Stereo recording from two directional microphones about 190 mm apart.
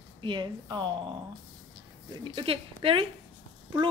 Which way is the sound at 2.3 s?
30° right (ahead or behind).